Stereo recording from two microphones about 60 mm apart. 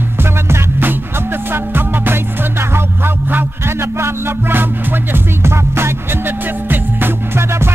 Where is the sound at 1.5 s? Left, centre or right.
Right.